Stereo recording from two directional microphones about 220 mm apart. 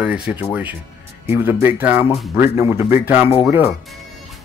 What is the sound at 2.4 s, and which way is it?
Speech, 30° left (ahead or behind).